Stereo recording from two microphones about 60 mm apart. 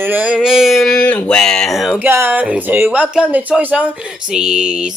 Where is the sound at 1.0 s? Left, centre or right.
Left.